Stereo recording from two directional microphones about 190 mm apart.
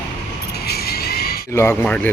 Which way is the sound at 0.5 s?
55° left (ahead or behind).